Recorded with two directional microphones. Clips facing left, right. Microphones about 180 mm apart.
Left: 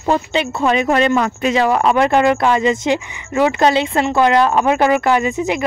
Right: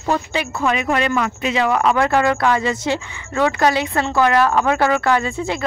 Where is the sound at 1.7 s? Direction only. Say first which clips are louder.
Left 3 dB; 25° left (ahead or behind).